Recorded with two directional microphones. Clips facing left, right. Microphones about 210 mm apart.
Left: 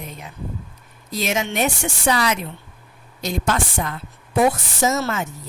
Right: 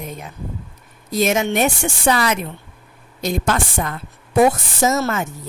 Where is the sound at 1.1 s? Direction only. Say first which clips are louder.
Right 6 dB; 50° right (ahead or behind).